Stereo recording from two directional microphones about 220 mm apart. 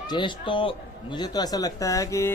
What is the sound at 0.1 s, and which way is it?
A man's voice, 20° left (ahead or behind).